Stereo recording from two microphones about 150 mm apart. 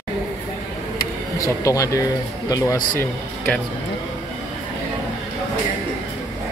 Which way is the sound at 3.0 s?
10° left (ahead or behind).